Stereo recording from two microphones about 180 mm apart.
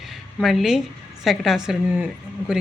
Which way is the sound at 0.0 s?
Centre (ahead or behind).